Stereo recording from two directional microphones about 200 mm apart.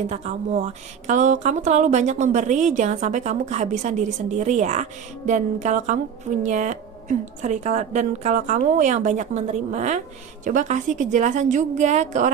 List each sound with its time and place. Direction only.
0.1 s a woman's voice: 35° right (ahead or behind)